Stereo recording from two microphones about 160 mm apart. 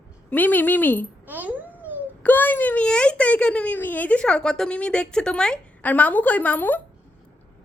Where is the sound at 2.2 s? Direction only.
10° left (ahead or behind).